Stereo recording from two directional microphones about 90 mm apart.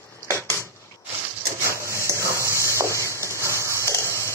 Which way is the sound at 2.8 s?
35° left (ahead or behind).